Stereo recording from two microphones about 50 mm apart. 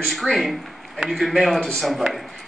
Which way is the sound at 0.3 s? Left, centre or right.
Centre.